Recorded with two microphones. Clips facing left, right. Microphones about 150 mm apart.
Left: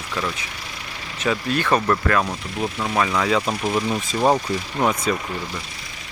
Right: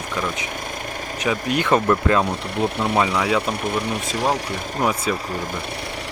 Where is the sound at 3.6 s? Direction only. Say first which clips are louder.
Left 2 dB; 60° right (ahead or behind).